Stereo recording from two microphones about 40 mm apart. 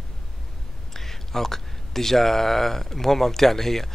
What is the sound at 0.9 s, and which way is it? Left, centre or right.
Speech, centre.